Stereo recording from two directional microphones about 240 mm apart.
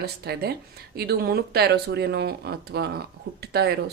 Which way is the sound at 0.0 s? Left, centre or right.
Right.